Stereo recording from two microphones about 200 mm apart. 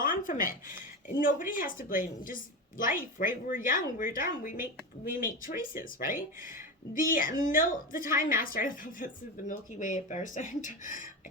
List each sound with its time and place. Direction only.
0.0 s a woman's voice: 40° left (ahead or behind)
6.9 s a woman's voice: 40° left (ahead or behind)